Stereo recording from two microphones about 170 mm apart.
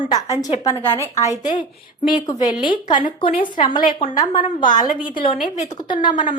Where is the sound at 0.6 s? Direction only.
10° left (ahead or behind).